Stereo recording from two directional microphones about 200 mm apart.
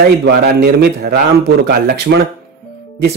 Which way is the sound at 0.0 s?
55° right (ahead or behind).